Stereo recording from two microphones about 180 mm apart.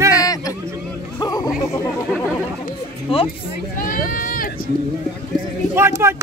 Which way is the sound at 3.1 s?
30° left (ahead or behind).